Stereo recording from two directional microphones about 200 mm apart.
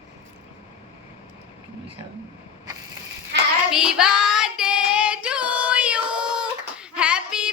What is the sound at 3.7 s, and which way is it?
Child singing, 5° right (ahead or behind).